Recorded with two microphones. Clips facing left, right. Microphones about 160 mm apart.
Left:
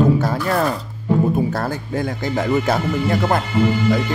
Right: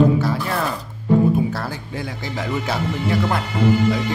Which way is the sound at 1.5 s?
50° left (ahead or behind).